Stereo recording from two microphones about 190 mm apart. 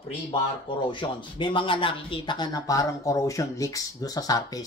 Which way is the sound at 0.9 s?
25° left (ahead or behind).